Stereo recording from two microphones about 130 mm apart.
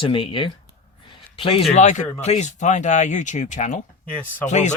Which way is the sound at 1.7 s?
65° left (ahead or behind).